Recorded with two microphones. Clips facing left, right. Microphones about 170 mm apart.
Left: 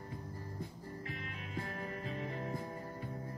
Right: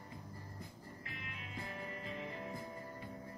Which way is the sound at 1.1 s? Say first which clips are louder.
Left 5 dB; 45° left (ahead or behind).